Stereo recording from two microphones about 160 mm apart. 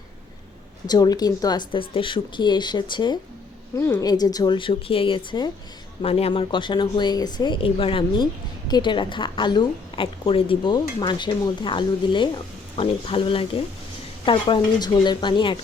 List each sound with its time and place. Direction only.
0.9 s speech: 25° left (ahead or behind)